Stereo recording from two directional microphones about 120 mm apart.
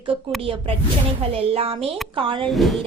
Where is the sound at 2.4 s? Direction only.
Centre (ahead or behind).